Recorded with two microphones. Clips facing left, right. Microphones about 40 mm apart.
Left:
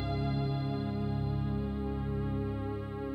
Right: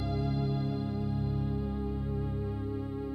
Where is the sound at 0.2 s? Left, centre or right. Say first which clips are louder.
Right 1 dB; left.